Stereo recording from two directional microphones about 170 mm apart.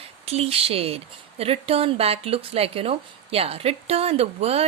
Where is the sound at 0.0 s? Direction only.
35° right (ahead or behind).